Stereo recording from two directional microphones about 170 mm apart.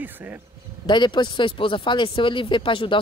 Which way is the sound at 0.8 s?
25° left (ahead or behind).